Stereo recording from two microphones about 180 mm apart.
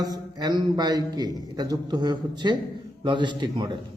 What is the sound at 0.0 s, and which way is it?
A man's voice, 20° right (ahead or behind).